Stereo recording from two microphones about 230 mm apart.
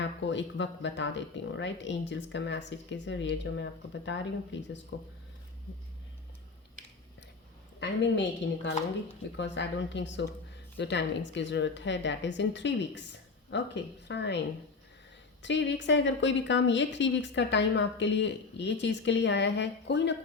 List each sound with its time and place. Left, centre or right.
0.0 s a woman's voice: left
7.8 s a woman's voice: left